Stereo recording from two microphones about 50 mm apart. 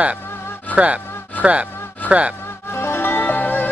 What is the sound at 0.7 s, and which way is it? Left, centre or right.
Music, right.